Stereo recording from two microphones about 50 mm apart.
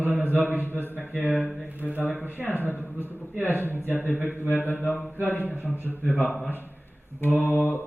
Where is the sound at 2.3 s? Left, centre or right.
Right.